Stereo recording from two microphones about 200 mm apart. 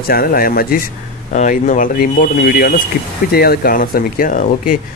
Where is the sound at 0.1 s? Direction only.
50° left (ahead or behind).